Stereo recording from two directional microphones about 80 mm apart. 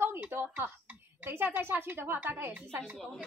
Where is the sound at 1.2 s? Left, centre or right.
Right.